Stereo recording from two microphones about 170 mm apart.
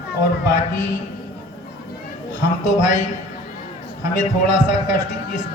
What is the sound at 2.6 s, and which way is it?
A man's voice, 45° left (ahead or behind).